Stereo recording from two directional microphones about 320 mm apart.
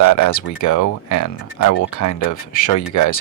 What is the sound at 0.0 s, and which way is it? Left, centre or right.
Speech, left.